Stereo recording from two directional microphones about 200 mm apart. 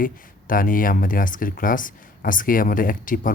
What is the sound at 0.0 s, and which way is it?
Speech, 45° left (ahead or behind).